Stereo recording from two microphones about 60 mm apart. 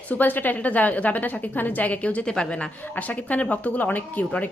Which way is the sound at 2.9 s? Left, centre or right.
Left.